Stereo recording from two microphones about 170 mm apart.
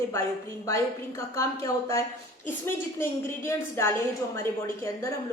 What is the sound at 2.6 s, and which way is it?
A woman's voice, 15° left (ahead or behind).